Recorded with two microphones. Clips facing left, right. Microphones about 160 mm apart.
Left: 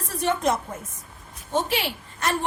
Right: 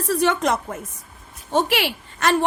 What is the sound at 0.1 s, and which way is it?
A woman's voice, 85° right.